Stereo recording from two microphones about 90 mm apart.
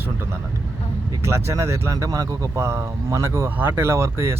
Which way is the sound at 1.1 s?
30° right (ahead or behind).